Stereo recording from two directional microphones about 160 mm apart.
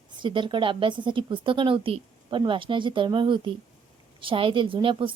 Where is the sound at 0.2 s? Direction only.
30° right (ahead or behind).